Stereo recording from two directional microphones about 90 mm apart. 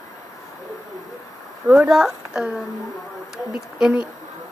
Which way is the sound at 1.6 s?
15° right (ahead or behind).